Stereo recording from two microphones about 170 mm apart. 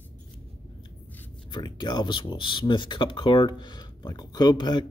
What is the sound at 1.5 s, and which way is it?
Speech, 25° left (ahead or behind).